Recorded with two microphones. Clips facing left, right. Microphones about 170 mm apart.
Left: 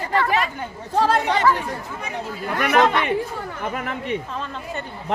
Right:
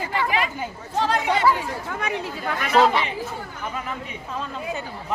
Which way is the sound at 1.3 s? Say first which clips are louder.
Left 1 dB; 10° right (ahead or behind).